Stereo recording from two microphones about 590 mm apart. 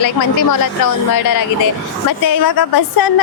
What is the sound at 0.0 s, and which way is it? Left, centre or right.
Speech, left.